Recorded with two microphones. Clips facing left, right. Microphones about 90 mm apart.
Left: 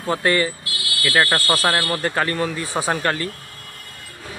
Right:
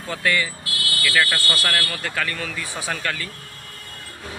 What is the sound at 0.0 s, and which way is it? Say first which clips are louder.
Speech: left 4 dB; 35° left (ahead or behind).